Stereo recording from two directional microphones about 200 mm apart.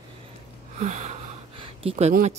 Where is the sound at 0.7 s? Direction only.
35° right (ahead or behind).